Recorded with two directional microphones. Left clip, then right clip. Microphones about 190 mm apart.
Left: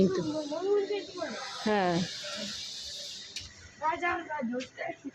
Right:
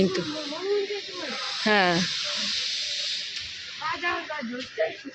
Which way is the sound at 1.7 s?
10° right (ahead or behind).